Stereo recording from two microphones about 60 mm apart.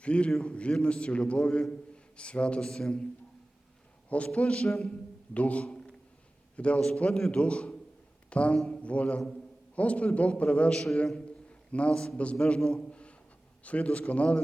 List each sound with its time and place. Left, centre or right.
0.0 s a man's voice: centre
4.1 s a man's voice: left
5.3 s a man's voice: left
10.7 s a man's voice: centre
11.4 s a man's voice: centre